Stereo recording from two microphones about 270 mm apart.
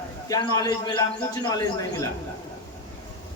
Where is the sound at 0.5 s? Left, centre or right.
Centre.